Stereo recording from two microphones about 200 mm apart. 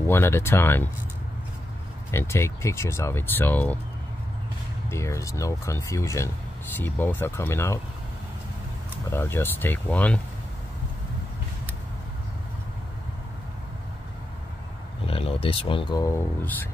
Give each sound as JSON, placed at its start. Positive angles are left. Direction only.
{"t": 0.0, "sound": "speech", "side_deg": 10}
{"t": 2.0, "sound": "speech", "side_deg": 15}
{"t": 4.8, "sound": "speech", "side_deg": 15}
{"t": 9.1, "sound": "speech", "side_deg": 10}
{"t": 15.0, "sound": "speech", "side_deg": 30}